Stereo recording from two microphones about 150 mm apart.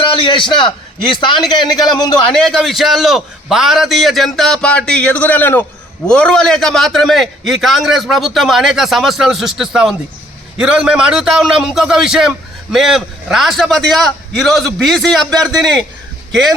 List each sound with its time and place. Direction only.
0.0 s a man's voice: 35° left (ahead or behind)
2.3 s a man's voice: centre (ahead or behind)